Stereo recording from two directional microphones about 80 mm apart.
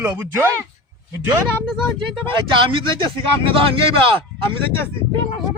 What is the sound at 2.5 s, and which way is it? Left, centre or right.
A man's voice, right.